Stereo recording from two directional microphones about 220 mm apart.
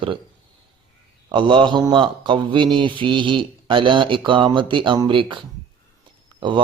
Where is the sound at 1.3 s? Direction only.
20° right (ahead or behind).